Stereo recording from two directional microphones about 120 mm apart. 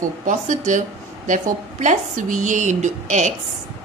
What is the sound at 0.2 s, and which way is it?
Speech, 90° right.